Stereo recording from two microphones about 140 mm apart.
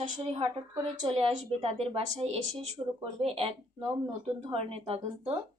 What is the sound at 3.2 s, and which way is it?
Speech, 40° right (ahead or behind).